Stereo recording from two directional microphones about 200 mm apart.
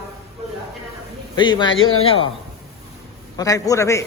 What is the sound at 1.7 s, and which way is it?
Speech, 90° left.